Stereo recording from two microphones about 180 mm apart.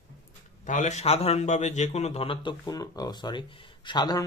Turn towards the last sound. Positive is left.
turn(degrees=25)  # may be behind; listen again after turning